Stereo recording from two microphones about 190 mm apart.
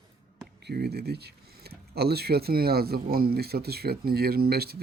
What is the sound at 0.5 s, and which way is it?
Speech, 60° right (ahead or behind).